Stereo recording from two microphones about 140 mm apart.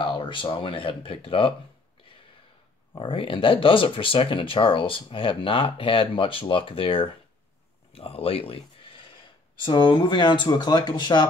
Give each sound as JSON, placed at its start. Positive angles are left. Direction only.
{"t": 0.0, "sound": "speech", "side_deg": 35}
{"t": 2.9, "sound": "speech", "side_deg": 35}